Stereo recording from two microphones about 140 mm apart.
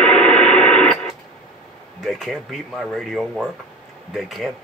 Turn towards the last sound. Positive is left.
turn(degrees=0)  # may be behind; listen again after turning